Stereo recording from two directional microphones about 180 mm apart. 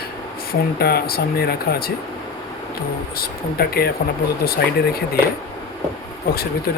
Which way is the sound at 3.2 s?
60° left (ahead or behind).